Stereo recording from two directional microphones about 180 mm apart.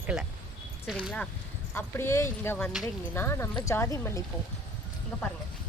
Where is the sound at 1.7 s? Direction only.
15° left (ahead or behind).